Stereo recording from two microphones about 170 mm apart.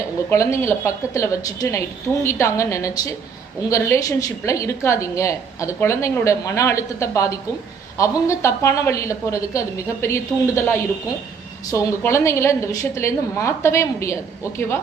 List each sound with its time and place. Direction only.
0.3 s a woman's voice: 15° left (ahead or behind)